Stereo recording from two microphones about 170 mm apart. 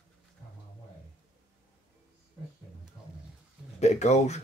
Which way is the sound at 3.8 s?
40° left (ahead or behind).